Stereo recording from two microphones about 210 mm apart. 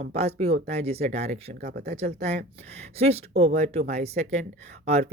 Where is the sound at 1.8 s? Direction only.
30° right (ahead or behind).